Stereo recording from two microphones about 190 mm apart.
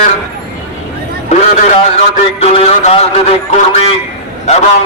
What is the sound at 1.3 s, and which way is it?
A man's voice, 35° left (ahead or behind).